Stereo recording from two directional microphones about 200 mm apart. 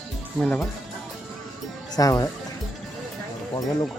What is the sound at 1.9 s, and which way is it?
Speech, 20° left (ahead or behind).